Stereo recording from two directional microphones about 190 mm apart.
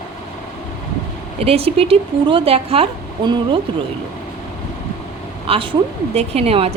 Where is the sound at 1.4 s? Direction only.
30° right (ahead or behind).